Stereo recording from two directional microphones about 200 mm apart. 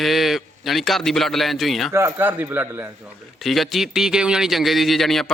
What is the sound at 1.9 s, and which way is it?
Speech, 10° right (ahead or behind).